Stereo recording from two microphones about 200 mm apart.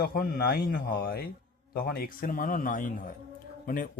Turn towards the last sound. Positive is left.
turn(degrees=45)  # may be behind; listen again after turning